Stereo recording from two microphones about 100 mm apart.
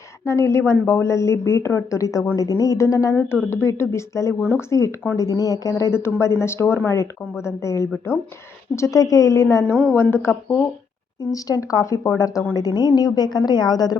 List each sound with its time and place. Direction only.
0.3 s a woman's voice: 30° left (ahead or behind)
9.6 s speech: 10° left (ahead or behind)
9.9 s speech: 25° left (ahead or behind)
11.3 s a woman's voice: 35° left (ahead or behind)